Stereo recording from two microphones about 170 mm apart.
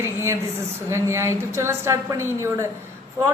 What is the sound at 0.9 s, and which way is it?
A woman's voice, 15° right (ahead or behind).